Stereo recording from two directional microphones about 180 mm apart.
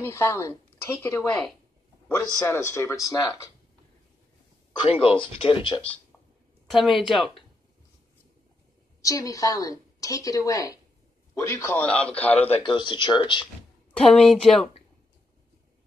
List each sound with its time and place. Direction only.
0.0 s a woman's voice: 15° left (ahead or behind)
4.8 s a woman's voice: 30° left (ahead or behind)
6.7 s a woman's voice: centre (ahead or behind)
9.0 s a woman's voice: 20° left (ahead or behind)
12.4 s a woman's voice: 30° left (ahead or behind)
13.9 s a woman's voice: 5° left (ahead or behind)